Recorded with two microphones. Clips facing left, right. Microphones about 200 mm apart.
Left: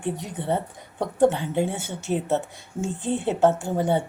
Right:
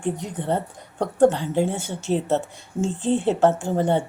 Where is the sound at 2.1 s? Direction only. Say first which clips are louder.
Right 3 dB; 25° right (ahead or behind).